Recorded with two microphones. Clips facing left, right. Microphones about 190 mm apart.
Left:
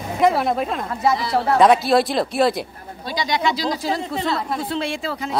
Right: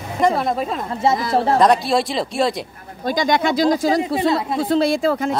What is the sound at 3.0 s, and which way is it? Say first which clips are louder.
Speech: right 4 dB; 50° right (ahead or behind).